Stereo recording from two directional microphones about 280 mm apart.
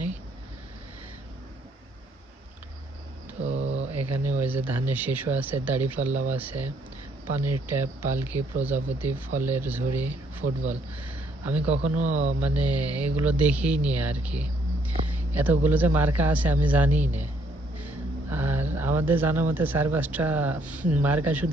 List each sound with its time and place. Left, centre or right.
3.4 s a sound: right
3.9 s a man's voice: centre
7.7 s a man's voice: centre
11.9 s speech: right
12.4 s a man's voice: centre